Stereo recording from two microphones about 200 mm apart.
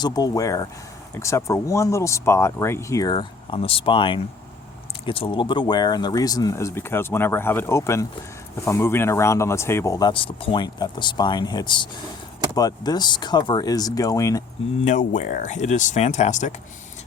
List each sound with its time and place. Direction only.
0.0 s speech: 20° left (ahead or behind)
14.8 s speech: 40° left (ahead or behind)